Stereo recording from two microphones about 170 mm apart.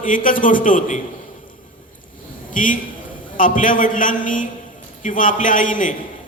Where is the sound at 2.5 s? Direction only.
50° left (ahead or behind).